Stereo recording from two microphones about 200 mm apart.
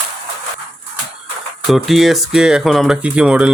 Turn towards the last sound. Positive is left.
turn(degrees=-5)  # may be behind; listen again after turning